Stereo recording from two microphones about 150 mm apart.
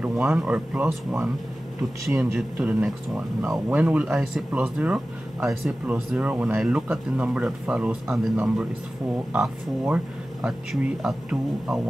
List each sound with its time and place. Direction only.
0.0 s speech: 5° right (ahead or behind)
2.3 s speech: 5° right (ahead or behind)